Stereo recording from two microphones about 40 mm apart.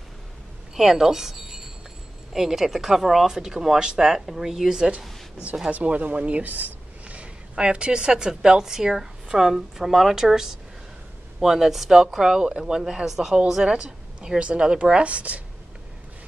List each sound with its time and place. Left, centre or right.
0.7 s a woman's voice: centre
3.3 s a woman's voice: centre
5.7 s speech: right
6.4 s a sound: right
7.5 s a woman's voice: right